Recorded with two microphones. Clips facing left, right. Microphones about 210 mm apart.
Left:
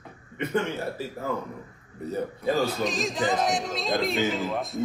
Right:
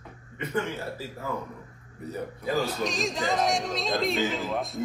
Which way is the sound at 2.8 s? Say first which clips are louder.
Left 2 dB; centre (ahead or behind).